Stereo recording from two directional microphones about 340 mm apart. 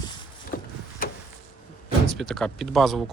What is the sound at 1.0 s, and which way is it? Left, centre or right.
Vehicle, left.